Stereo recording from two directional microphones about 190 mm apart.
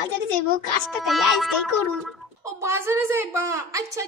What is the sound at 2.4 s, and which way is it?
A woman's voice, 15° right (ahead or behind).